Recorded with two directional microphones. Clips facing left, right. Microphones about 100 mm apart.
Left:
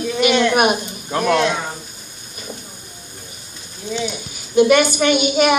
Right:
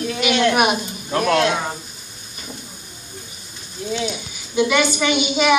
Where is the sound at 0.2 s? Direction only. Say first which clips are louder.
Left 2 dB; 50° left (ahead or behind).